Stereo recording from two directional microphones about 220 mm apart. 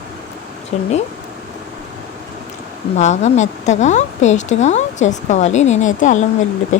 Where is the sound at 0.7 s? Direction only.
30° left (ahead or behind).